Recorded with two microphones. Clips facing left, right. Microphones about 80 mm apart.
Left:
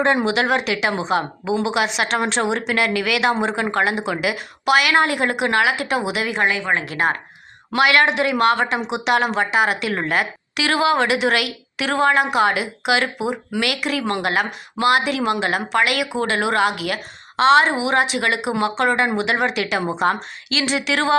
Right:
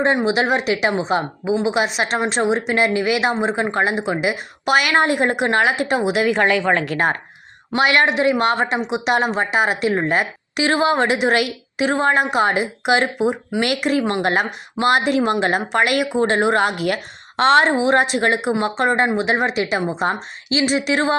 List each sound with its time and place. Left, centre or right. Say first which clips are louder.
0.5 s speech: right 2 dB; right
6.2 s speech: right 4 dB; right
7.8 s speech: even; right